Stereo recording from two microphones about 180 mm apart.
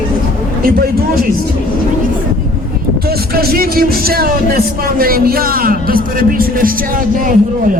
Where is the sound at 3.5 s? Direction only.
55° right (ahead or behind).